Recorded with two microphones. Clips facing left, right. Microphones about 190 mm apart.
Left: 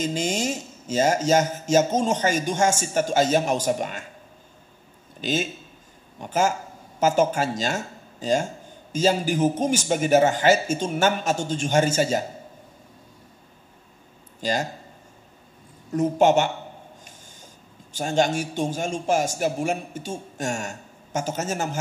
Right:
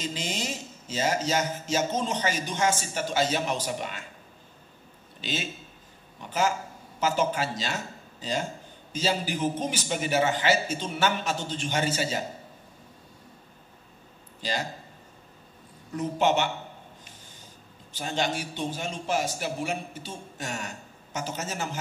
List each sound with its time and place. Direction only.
0.0 s speech: 45° left (ahead or behind)
5.2 s speech: 45° left (ahead or behind)
14.4 s speech: 45° left (ahead or behind)
15.9 s speech: 45° left (ahead or behind)
17.9 s speech: 45° left (ahead or behind)